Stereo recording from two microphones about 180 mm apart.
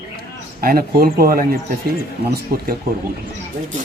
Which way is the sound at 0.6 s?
55° right (ahead or behind).